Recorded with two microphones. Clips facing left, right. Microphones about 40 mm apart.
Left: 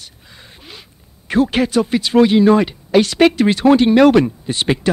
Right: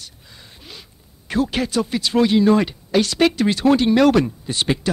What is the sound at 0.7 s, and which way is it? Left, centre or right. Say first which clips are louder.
Speech: even; left.